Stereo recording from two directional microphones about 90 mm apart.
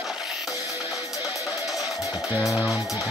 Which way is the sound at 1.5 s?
5° right (ahead or behind).